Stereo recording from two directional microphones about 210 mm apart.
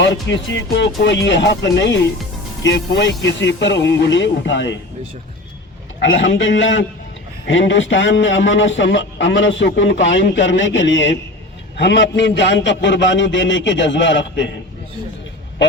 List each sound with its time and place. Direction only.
0.0 s a man's voice: 60° left (ahead or behind)
6.0 s a man's voice: 65° left (ahead or behind)